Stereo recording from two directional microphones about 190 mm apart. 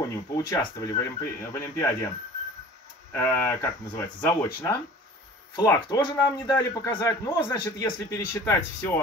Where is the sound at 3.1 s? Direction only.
15° left (ahead or behind).